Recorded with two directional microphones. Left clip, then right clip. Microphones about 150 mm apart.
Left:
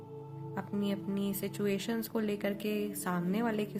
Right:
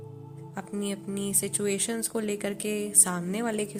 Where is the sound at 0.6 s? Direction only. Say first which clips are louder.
Right 3 dB; 25° right (ahead or behind).